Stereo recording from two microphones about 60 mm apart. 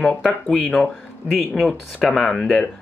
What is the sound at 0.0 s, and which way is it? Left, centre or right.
Speech, centre.